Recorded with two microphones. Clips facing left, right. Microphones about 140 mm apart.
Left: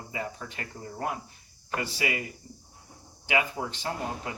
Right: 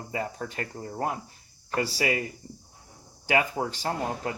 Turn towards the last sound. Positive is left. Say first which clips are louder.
# right 4 dB
turn(degrees=-40)  # may be behind; listen again after turning